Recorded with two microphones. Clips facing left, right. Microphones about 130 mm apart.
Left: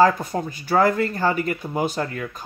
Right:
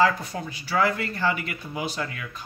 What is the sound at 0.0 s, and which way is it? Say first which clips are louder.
Speech: left 5 dB; 45° left (ahead or behind).